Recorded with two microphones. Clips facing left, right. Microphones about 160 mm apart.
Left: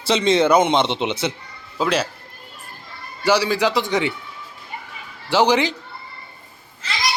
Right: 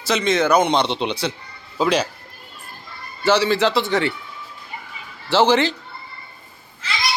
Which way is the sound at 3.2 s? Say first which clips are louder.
Right 1 dB; 10° left (ahead or behind).